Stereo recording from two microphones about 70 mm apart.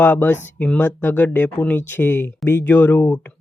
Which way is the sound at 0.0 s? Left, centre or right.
Left.